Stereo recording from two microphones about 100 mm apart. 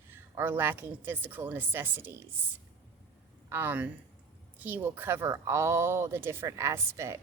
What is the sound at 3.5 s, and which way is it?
A woman's voice, 20° right (ahead or behind).